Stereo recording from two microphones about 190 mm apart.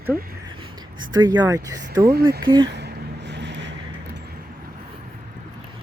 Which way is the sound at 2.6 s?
65° right (ahead or behind).